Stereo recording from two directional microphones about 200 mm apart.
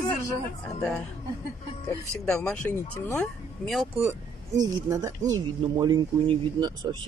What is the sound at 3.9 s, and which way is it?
A woman's voice, 15° right (ahead or behind).